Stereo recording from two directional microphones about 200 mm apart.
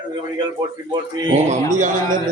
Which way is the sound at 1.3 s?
35° right (ahead or behind).